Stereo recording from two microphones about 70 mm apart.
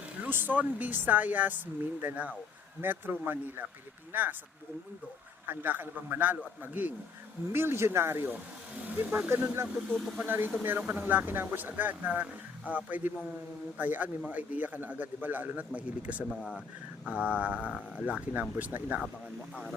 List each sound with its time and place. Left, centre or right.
0.2 s speech: right
5.5 s speech: right
16.3 s speech: centre
17.1 s speech: centre